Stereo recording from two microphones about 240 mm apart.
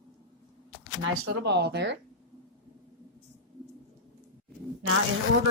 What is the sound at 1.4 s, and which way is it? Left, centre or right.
Speech, right.